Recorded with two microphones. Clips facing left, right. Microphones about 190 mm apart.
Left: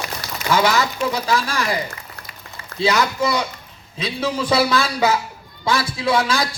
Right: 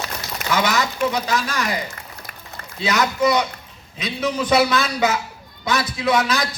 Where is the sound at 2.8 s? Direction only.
30° left (ahead or behind).